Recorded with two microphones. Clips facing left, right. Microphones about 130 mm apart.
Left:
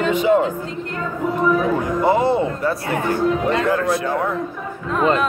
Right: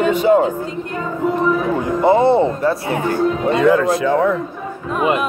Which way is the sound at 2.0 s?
25° right (ahead or behind).